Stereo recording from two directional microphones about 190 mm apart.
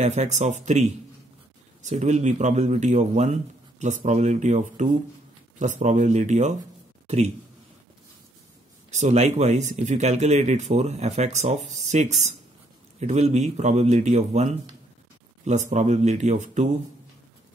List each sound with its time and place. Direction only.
0.0 s speech: 40° right (ahead or behind)
8.9 s speech: 35° right (ahead or behind)